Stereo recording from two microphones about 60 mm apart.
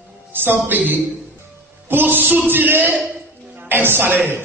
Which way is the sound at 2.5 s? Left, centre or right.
Right.